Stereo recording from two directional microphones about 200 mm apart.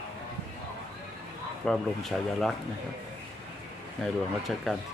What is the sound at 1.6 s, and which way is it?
Speech, centre (ahead or behind).